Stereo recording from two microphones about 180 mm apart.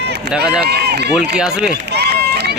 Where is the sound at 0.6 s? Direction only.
65° right (ahead or behind).